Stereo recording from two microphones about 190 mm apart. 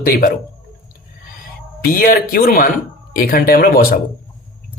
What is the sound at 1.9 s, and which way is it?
Speech, 50° left (ahead or behind).